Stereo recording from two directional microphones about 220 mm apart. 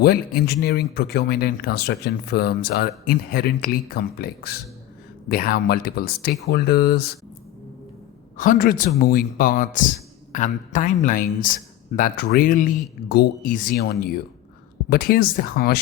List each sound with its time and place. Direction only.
0.0 s speech: 45° left (ahead or behind)
8.4 s speech: 35° left (ahead or behind)